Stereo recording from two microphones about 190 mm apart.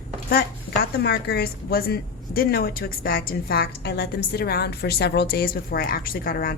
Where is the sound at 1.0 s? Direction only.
60° left (ahead or behind).